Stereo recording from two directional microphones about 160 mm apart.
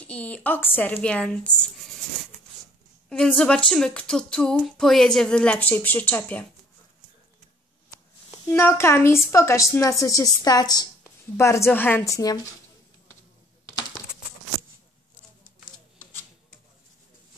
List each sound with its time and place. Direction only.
0.0 s a woman's voice: 10° left (ahead or behind)
3.1 s speech: 5° left (ahead or behind)
8.5 s a woman's voice: 15° left (ahead or behind)